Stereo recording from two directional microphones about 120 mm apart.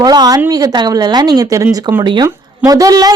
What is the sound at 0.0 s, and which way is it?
A woman's voice, 35° right (ahead or behind).